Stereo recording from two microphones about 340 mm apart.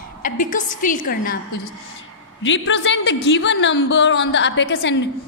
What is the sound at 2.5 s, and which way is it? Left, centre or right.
A woman's voice, left.